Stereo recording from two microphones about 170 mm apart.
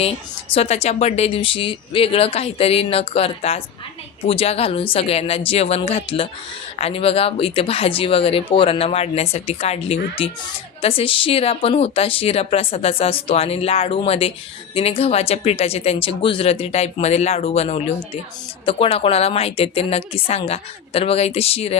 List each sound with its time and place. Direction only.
0.5 s speech: 40° left (ahead or behind)